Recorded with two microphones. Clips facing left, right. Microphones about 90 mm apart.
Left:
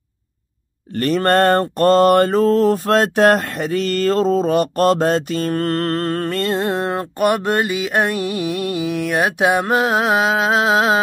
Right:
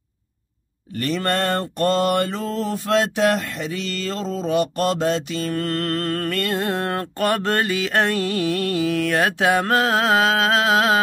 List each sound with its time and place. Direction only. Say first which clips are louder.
0.9 s mantra: left 7 dB; 45° left (ahead or behind); by 11.0 s 20° left (ahead or behind)